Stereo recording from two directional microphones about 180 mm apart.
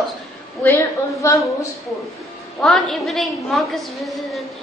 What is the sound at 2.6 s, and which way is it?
A woman's voice, centre (ahead or behind).